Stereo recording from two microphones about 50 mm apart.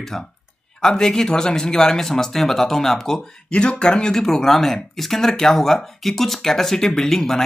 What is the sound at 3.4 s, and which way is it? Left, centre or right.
Speech, centre.